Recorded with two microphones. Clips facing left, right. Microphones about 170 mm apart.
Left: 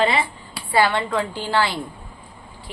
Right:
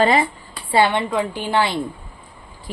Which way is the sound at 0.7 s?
20° right (ahead or behind).